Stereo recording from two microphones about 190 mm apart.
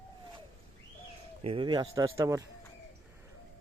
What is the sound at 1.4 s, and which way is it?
Speech, 30° right (ahead or behind).